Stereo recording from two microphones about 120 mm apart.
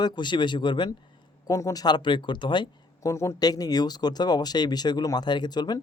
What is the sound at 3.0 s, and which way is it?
Speech, 25° left (ahead or behind).